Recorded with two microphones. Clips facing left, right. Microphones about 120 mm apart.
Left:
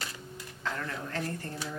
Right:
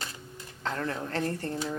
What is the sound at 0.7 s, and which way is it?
Speech, 35° right (ahead or behind).